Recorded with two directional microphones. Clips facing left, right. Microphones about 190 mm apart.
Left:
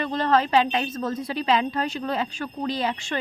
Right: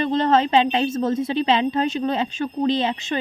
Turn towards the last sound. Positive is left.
turn(degrees=-25)  # may be behind; listen again after turning